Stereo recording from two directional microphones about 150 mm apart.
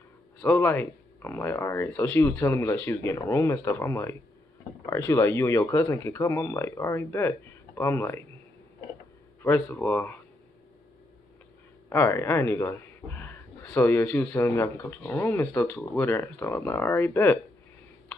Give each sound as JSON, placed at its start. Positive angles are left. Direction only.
{"t": 0.4, "sound": "speech", "side_deg": 15}
{"t": 9.4, "sound": "speech", "side_deg": 15}
{"t": 11.9, "sound": "speech", "side_deg": 15}